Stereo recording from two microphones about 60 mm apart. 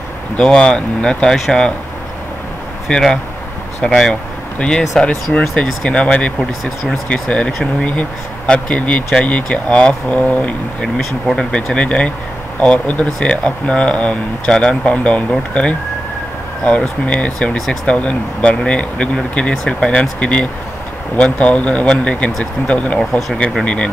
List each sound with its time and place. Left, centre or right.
0.4 s speech: centre
2.9 s speech: centre
3.8 s speech: centre
11.0 s speech: centre
11.7 s speech: centre
22.9 s speech: centre
23.6 s speech: centre